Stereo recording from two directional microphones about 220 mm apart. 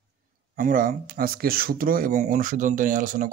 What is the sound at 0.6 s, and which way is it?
Speech, 40° right (ahead or behind).